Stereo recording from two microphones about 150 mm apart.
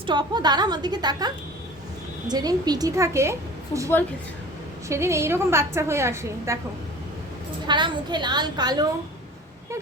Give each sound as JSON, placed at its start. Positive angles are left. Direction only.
{"t": 0.0, "sound": "a woman's voice", "side_deg": -30}
{"t": 2.3, "sound": "a woman's voice", "side_deg": -25}
{"t": 4.9, "sound": "a woman's voice", "side_deg": -20}
{"t": 7.7, "sound": "a woman's voice", "side_deg": -30}